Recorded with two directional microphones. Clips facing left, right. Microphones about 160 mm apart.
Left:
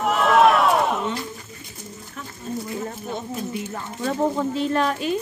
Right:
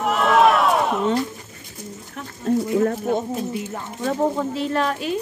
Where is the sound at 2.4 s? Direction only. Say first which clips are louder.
Right 10 dB; 75° right (ahead or behind).